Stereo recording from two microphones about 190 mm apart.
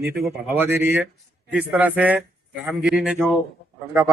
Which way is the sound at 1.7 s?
5° right (ahead or behind).